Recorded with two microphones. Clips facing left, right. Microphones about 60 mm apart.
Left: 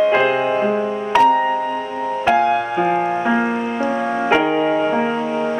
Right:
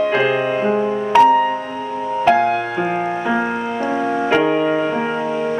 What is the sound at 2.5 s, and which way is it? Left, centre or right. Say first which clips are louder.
Music: left 2 dB; centre.